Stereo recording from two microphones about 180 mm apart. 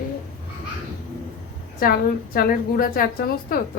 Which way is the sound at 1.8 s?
55° left (ahead or behind).